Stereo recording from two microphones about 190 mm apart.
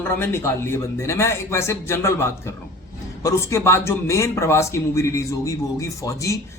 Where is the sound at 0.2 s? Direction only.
10° left (ahead or behind).